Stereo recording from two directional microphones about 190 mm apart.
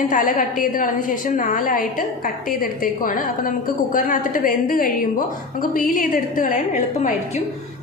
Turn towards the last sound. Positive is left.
turn(degrees=45)  # may be behind; listen again after turning